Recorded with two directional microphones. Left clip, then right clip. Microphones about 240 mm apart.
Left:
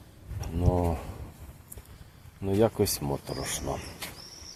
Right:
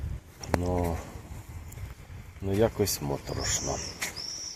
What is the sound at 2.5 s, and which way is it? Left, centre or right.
Speech, centre.